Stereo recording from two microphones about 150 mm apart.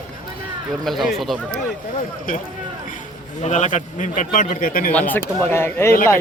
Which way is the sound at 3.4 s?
50° left (ahead or behind).